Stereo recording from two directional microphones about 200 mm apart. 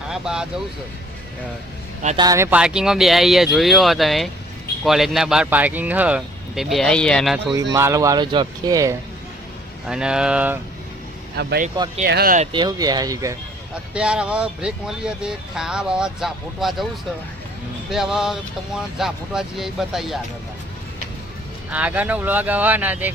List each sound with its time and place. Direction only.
0.1 s speech: 5° right (ahead or behind)
2.1 s speech: 15° right (ahead or behind); by 7.3 s 5° left (ahead or behind)
7.7 s speech: 15° right (ahead or behind)
9.8 s speech: 5° right (ahead or behind)
11.3 s speech: 55° right (ahead or behind)
12.4 s speech: 25° right (ahead or behind)
13.9 s speech: 5° right (ahead or behind)
17.9 s speech: centre (ahead or behind)
21.7 s speech: 5° right (ahead or behind)